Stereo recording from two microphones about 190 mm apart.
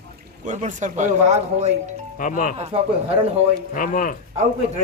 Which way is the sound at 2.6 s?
30° right (ahead or behind).